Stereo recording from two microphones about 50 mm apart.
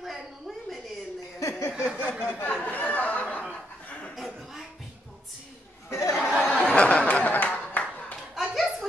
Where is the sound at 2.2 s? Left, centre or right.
Left.